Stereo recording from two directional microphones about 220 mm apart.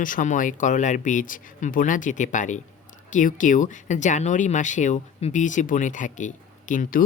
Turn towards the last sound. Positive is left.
turn(degrees=35)  # may be behind; listen again after turning